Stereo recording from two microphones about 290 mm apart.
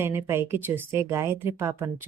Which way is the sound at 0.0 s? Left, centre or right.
Centre.